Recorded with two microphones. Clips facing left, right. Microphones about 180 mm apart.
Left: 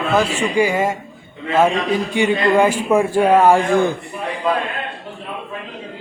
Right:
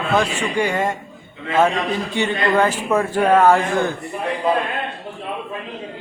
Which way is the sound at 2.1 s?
10° left (ahead or behind).